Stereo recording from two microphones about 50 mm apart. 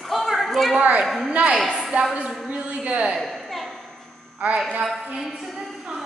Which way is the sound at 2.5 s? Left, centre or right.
Right.